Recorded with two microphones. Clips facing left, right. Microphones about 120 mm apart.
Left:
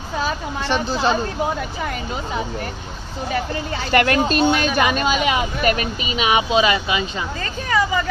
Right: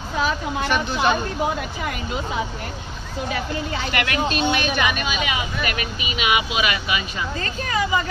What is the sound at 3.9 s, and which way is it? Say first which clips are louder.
Speech: left 8 dB; 40° left (ahead or behind).